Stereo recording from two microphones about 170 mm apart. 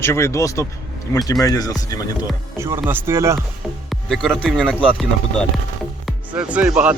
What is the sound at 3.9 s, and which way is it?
Speech, centre (ahead or behind).